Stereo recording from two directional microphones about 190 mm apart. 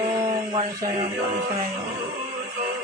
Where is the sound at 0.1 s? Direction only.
25° right (ahead or behind).